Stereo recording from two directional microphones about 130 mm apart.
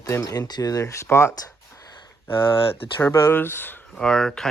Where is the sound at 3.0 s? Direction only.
15° left (ahead or behind).